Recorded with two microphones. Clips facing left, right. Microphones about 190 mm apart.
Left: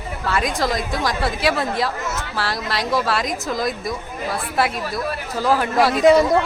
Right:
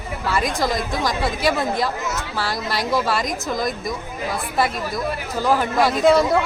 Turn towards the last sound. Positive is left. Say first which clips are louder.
# left 2 dB
turn(degrees=15)  # may be behind; listen again after turning